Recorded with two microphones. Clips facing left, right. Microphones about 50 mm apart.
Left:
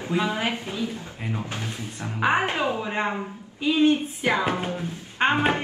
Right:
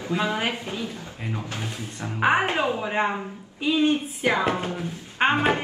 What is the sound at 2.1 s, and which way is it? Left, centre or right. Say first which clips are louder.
Speech: right 1 dB; centre.